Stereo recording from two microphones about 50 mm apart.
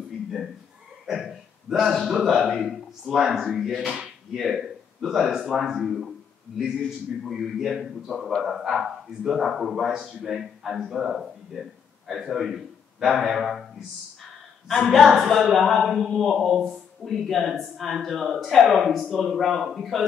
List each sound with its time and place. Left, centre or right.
1.0 s hiccup: centre
1.8 s speech: centre
3.2 s speech: centre
3.8 s speech: right
4.3 s speech: centre
7.2 s speech: centre
12.2 s a man's voice: centre
14.7 s speech: centre